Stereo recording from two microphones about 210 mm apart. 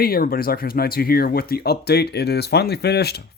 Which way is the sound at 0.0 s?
45° left (ahead or behind).